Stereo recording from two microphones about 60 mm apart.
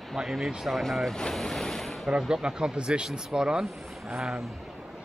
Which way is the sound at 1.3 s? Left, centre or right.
Centre.